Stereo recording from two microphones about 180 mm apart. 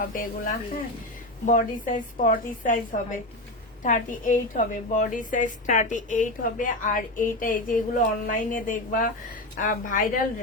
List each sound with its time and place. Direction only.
0.0 s a woman's voice: 50° left (ahead or behind)